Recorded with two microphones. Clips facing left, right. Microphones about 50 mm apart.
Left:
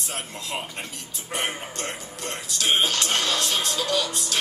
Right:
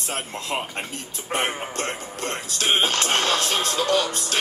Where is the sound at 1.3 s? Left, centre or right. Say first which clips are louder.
Right 4 dB; right.